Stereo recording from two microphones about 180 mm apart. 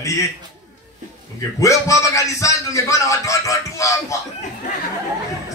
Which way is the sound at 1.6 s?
15° left (ahead or behind).